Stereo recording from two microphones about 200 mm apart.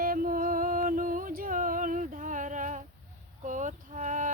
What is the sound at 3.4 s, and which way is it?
Insect, 40° right (ahead or behind).